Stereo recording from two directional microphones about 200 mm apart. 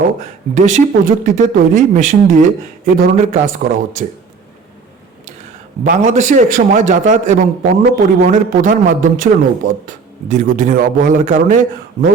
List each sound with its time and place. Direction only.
0.5 s a man's voice: 40° right (ahead or behind)
5.8 s a man's voice: 40° right (ahead or behind)